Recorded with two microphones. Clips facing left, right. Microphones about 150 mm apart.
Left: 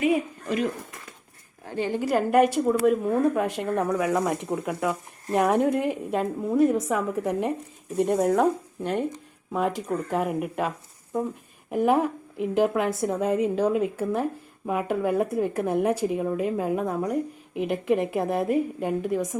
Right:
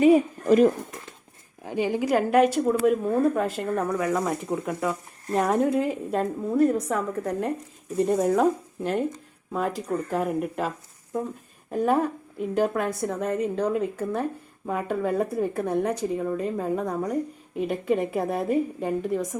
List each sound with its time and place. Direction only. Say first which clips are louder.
0.0 s a sound: right 6 dB; 40° right (ahead or behind)
1.6 s a woman's voice: right 2 dB; 15° right (ahead or behind)
2.0 s speech: even; centre (ahead or behind)
11.7 s speech: left 1 dB; 5° left (ahead or behind)
12.9 s a woman's voice: left 3 dB; 20° left (ahead or behind); by 19.4 s centre (ahead or behind)